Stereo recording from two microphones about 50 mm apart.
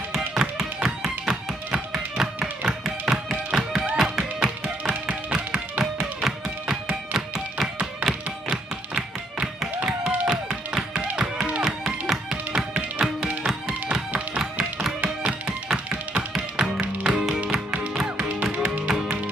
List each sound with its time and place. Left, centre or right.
0.4 s tap: centre
2.6 s music: centre
7.2 s tap: centre
10.2 s music: centre
14.6 s music: centre
15.0 s tap: right
16.8 s music: right